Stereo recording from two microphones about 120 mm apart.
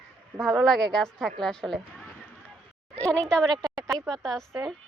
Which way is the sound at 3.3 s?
5° left (ahead or behind).